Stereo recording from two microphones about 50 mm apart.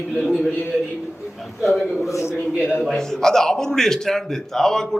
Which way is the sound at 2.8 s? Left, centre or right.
Centre.